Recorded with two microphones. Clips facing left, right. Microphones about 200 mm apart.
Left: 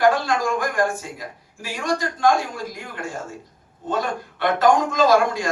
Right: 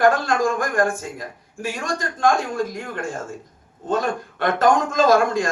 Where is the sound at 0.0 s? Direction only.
50° right (ahead or behind).